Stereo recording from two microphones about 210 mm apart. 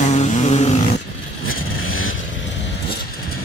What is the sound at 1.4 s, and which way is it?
Vehicle, 75° left (ahead or behind).